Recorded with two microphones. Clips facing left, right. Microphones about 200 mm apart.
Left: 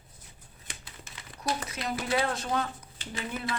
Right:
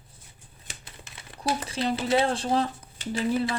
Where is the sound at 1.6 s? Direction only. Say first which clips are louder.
Right 6 dB; 30° right (ahead or behind).